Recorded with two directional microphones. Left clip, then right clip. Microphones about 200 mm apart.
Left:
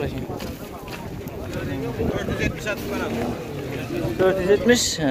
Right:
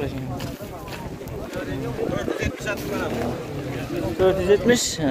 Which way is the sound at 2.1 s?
55° right (ahead or behind).